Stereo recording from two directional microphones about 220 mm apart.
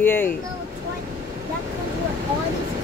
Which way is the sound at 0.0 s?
10° left (ahead or behind).